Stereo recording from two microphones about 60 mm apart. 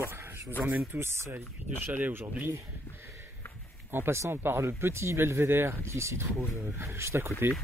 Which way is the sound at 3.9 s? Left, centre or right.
Right.